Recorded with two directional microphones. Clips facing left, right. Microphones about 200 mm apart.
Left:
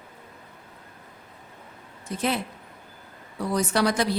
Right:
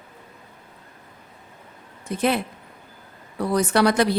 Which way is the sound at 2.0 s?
60° right (ahead or behind).